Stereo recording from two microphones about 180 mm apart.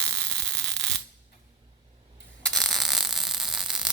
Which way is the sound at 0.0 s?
5° left (ahead or behind).